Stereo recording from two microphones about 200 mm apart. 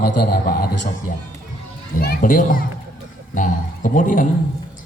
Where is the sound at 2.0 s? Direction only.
45° left (ahead or behind).